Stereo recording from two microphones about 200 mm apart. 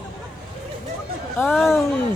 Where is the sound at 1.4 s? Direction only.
10° left (ahead or behind).